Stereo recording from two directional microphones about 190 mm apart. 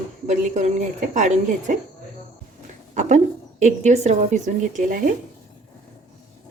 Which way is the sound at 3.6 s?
40° right (ahead or behind).